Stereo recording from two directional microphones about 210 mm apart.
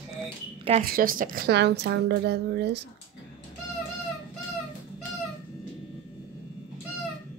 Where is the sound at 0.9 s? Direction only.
40° right (ahead or behind).